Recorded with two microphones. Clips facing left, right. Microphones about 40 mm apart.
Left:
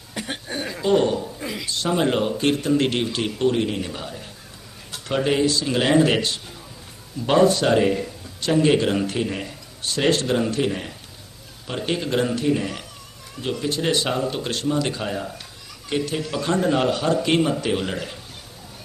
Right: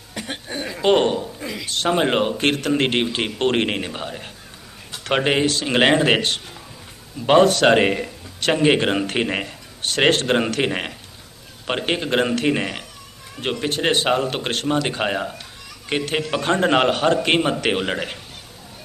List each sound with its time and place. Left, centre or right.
0.8 s speech: right
3.4 s speech: right
5.0 s a man's voice: right
7.3 s a man's voice: right
8.6 s speech: right
9.0 s a man's voice: right
11.9 s speech: right
12.4 s speech: right
13.4 s a man's voice: right
16.6 s a man's voice: right
17.7 s speech: right